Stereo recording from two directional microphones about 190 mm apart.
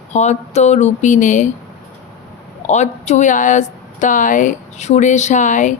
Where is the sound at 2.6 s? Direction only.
35° left (ahead or behind).